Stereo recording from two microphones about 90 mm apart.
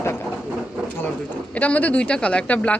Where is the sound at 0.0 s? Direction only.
30° left (ahead or behind).